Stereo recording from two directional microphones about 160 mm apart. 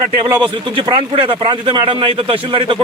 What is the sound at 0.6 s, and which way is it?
A man's voice, 30° right (ahead or behind).